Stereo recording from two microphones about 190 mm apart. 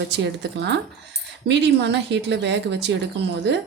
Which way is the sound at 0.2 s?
65° right (ahead or behind).